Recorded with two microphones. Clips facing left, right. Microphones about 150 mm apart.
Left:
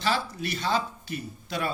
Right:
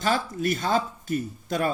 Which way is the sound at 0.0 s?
45° right (ahead or behind).